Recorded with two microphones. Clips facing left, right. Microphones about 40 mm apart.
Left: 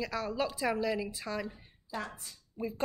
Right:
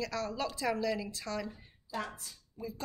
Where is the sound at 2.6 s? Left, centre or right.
Left.